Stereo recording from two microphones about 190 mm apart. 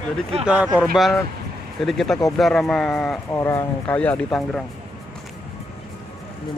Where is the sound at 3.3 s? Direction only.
15° left (ahead or behind).